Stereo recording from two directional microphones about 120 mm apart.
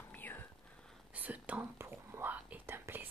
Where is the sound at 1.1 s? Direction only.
15° right (ahead or behind).